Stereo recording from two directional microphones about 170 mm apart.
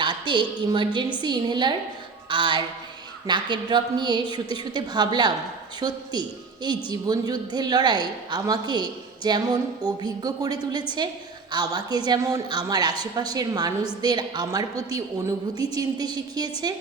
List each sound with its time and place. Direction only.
0.0 s a woman's voice: 30° right (ahead or behind)